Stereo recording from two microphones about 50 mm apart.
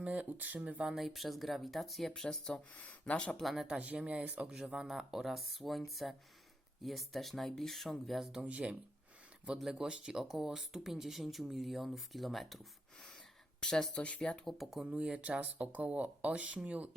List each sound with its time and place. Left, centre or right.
0.0 s speech: right
0.9 s speech: centre
2.7 s speech: left
3.4 s speech: centre
3.8 s speech: right
4.5 s speech: centre
8.4 s speech: right
9.7 s speech: centre
13.6 s speech: centre
14.4 s speech: centre
14.8 s speech: right